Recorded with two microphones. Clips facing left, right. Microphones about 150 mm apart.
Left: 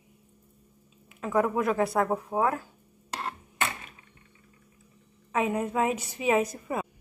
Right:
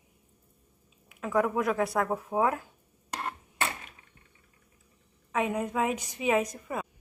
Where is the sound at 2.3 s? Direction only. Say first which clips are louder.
Even; 15° right (ahead or behind).